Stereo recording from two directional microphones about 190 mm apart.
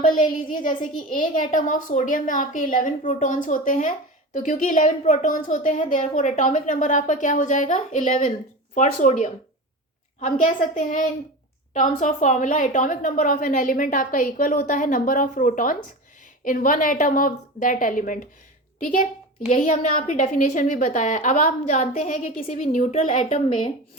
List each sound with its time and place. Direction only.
0.0 s a woman's voice: 45° left (ahead or behind)
19.5 s a woman's voice: 40° left (ahead or behind)